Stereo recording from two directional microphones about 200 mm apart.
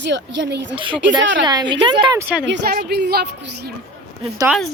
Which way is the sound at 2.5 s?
55° right (ahead or behind).